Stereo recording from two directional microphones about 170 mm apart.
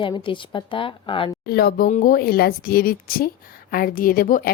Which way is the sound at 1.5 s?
65° left (ahead or behind).